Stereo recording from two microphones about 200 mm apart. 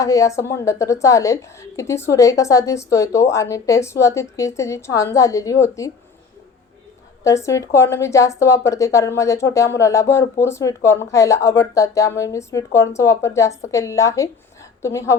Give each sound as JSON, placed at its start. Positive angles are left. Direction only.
{"t": 0.0, "sound": "speech", "side_deg": 15}
{"t": 7.3, "sound": "speech", "side_deg": 15}